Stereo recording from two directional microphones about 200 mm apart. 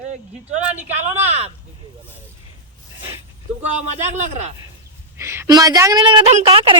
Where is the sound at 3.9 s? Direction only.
35° right (ahead or behind).